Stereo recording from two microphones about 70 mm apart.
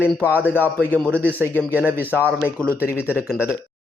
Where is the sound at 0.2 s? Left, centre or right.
Right.